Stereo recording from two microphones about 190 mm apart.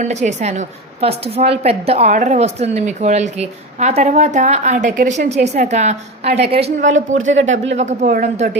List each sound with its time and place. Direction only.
0.0 s speech: 35° right (ahead or behind)
7.3 s speech: 85° right
7.7 s speech: 35° right (ahead or behind)